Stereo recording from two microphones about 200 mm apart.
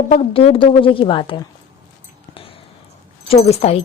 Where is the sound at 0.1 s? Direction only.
30° left (ahead or behind).